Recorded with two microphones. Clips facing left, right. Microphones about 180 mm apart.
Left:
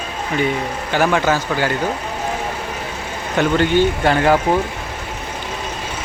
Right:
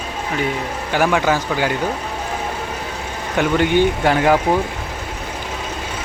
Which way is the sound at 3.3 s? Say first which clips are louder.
Left 1 dB; 10° right (ahead or behind).